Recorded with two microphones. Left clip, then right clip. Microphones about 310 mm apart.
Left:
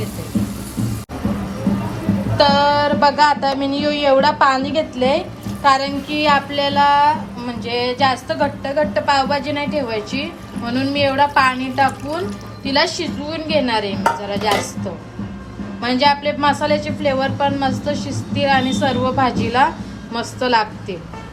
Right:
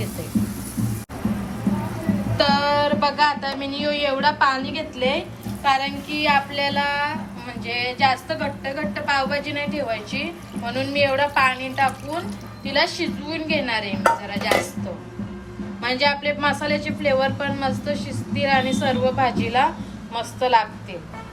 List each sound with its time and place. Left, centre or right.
2.4 s speech: centre
5.6 s child singing: centre
15.8 s child singing: centre
20.1 s a woman's voice: centre